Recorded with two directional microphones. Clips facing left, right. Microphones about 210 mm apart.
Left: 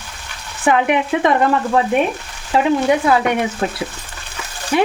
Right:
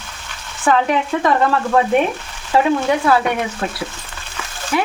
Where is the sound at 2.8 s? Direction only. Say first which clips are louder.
Left 1 dB; 20° left (ahead or behind).